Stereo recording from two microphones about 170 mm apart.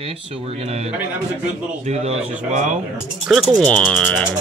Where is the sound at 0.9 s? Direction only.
10° right (ahead or behind).